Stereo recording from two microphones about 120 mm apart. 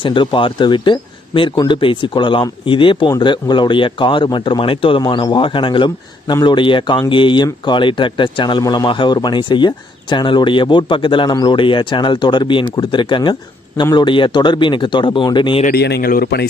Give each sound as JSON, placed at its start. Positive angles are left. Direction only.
{"t": 0.0, "sound": "speech", "side_deg": 40}